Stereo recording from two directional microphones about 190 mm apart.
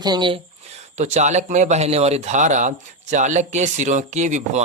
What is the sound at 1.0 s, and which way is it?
Speech, 35° right (ahead or behind).